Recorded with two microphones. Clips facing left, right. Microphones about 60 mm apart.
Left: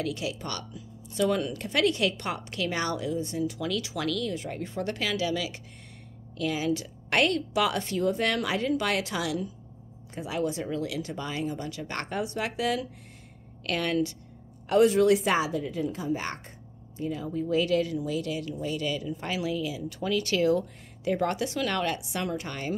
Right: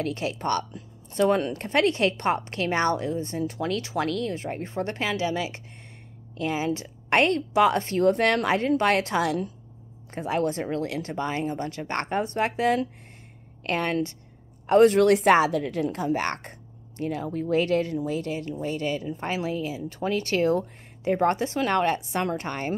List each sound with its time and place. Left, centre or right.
0.0 s a woman's voice: right
8.0 s a woman's voice: right
14.7 s a woman's voice: right